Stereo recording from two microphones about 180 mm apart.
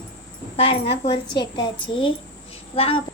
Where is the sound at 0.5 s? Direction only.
30° left (ahead or behind).